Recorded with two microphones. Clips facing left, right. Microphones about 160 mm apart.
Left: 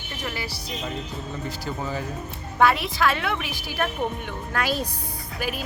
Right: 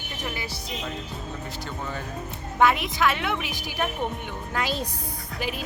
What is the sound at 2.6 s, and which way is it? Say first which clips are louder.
A woman's voice: left 1 dB; 15° right (ahead or behind).